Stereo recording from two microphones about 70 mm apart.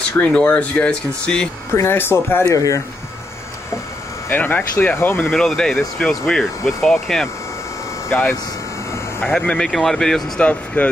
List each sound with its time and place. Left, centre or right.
0.2 s speech: left
1.7 s speech: left
2.5 s speech: left
4.3 s speech: left
5.3 s speech: centre
8.1 s speech: left
9.2 s speech: centre
9.6 s speech: centre
10.4 s speech: centre